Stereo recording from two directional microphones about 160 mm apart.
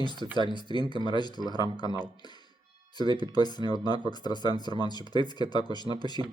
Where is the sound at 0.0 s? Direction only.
25° left (ahead or behind).